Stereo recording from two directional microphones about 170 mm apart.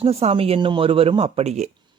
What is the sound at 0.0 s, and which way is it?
Speech, 35° right (ahead or behind).